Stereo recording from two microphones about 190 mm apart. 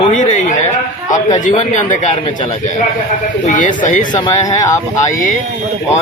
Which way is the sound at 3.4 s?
40° left (ahead or behind).